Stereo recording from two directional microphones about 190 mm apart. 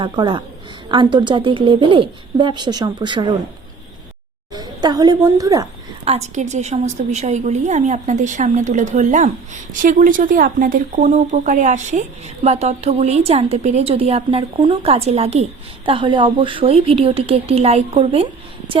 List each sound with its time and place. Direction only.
0.0 s speech: 25° right (ahead or behind)
4.5 s a woman's voice: 20° right (ahead or behind)
6.1 s speech: 35° right (ahead or behind)